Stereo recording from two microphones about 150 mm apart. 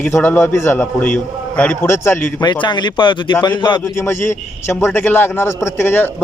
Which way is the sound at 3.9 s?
15° left (ahead or behind).